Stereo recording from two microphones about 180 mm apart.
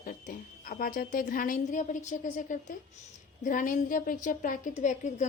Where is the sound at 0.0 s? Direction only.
50° left (ahead or behind).